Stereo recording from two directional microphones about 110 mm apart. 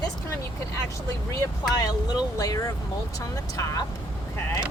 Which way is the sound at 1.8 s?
35° left (ahead or behind).